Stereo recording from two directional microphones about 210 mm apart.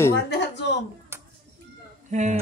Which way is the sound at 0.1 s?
55° left (ahead or behind).